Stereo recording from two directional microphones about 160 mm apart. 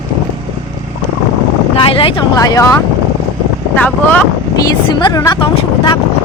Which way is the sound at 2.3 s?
20° left (ahead or behind).